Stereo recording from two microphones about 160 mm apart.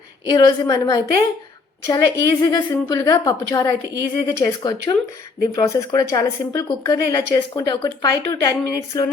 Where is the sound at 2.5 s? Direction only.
25° left (ahead or behind).